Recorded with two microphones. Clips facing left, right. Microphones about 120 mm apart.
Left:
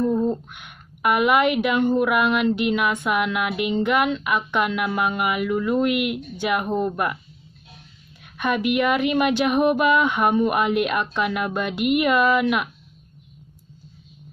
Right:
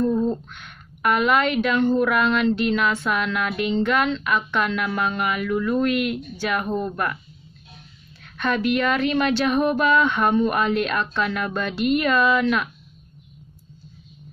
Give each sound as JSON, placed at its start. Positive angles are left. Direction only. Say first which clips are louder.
{"t": 0.0, "sound": "a woman's voice", "louder": "even", "side_deg": 15}
{"t": 8.2, "sound": "a woman's voice", "louder": "even", "side_deg": 15}